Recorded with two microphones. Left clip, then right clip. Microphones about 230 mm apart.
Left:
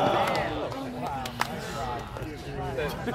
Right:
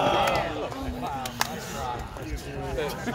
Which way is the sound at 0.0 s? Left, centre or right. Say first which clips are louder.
Right 1 dB; right.